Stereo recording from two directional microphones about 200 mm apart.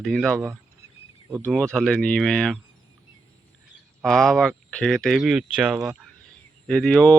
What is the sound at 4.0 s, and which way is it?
Speech, centre (ahead or behind).